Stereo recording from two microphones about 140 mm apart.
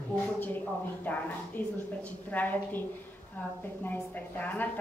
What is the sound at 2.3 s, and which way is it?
Speech, 15° left (ahead or behind).